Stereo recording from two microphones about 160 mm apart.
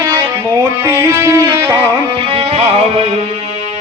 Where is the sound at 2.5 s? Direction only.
40° right (ahead or behind).